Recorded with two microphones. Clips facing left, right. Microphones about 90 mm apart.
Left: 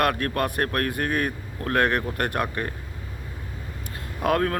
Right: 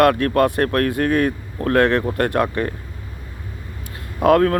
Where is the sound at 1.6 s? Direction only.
40° right (ahead or behind).